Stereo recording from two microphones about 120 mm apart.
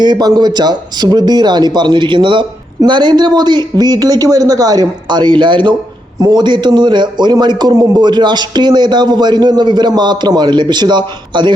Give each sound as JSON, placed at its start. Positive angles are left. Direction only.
{"t": 0.0, "sound": "speech", "side_deg": -35}